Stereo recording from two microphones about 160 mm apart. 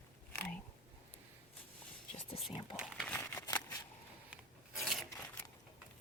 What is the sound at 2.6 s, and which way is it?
Crumpling, 25° left (ahead or behind).